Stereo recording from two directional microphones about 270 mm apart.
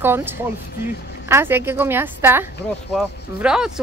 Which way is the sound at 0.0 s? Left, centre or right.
Centre.